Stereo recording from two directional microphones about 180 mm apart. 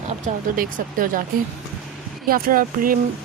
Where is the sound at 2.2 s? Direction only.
55° right (ahead or behind).